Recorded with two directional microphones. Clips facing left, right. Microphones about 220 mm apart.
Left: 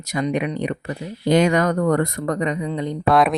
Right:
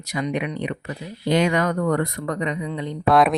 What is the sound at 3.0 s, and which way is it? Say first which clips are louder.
Speech: even; centre (ahead or behind).